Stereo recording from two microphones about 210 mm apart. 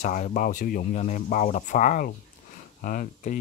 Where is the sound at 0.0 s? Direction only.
35° left (ahead or behind).